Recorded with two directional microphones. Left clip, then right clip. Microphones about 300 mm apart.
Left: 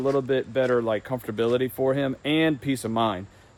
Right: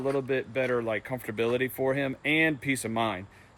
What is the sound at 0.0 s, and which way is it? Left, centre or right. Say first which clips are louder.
Speech: left 5 dB; left.